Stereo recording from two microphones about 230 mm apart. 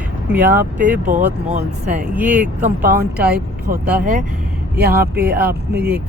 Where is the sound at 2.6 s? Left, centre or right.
Right.